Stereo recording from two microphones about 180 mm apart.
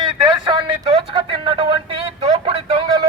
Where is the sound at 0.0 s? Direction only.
25° right (ahead or behind).